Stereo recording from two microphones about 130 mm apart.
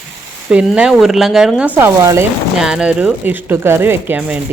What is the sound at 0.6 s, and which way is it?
Speech, centre (ahead or behind).